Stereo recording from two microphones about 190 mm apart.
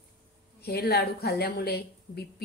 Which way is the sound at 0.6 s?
55° left (ahead or behind).